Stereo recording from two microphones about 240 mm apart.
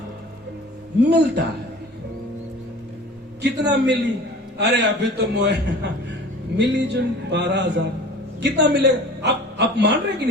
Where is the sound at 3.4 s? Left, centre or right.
Right.